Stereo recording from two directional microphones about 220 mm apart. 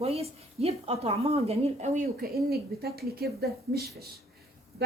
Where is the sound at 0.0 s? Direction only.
30° right (ahead or behind).